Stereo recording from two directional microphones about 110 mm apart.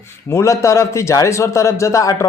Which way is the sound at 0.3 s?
30° left (ahead or behind).